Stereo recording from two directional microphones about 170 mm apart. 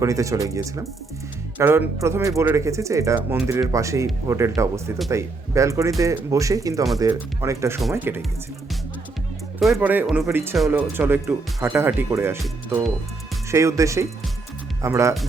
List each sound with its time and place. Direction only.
0.0 s speech: 20° right (ahead or behind)
9.6 s speech: centre (ahead or behind); by 15.1 s 15° right (ahead or behind)